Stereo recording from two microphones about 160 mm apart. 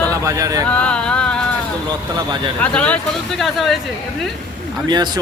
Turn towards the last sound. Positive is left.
turn(degrees=-25)  # may be behind; listen again after turning